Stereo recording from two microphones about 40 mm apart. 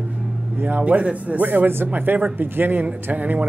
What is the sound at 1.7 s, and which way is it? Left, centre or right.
Speech, right.